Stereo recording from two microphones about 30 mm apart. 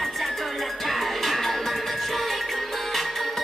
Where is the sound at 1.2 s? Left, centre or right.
Centre.